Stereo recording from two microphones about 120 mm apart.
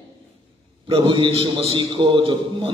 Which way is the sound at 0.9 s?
45° right (ahead or behind).